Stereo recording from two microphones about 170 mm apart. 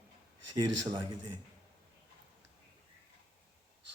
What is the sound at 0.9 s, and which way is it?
Speech, 25° right (ahead or behind).